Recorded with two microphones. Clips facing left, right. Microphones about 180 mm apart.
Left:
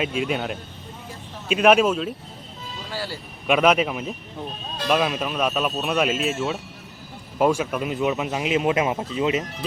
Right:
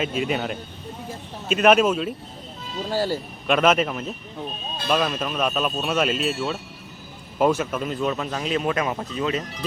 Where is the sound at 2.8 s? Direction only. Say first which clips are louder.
Right 8 dB; 45° right (ahead or behind).